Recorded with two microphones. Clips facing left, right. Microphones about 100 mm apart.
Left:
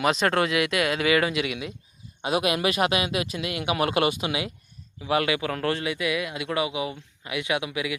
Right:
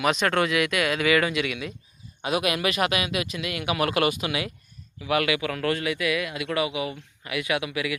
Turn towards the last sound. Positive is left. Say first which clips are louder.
# even
turn(degrees=20)  # may be behind; listen again after turning